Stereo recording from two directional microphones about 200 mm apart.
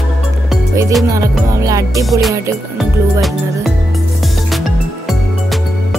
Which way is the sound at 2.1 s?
Centre (ahead or behind).